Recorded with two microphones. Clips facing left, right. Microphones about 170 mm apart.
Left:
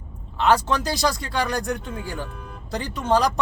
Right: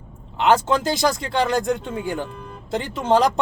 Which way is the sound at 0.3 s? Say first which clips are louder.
Right 2 dB; 20° right (ahead or behind).